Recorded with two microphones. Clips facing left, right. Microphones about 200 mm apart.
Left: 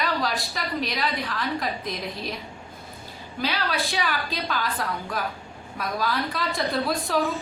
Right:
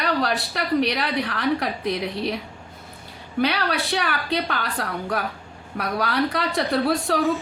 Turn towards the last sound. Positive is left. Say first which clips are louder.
# right 4 dB
turn(degrees=-70)  # may be behind; listen again after turning